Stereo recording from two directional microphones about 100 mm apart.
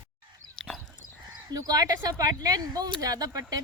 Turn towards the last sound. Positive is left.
turn(degrees=-40)  # may be behind; listen again after turning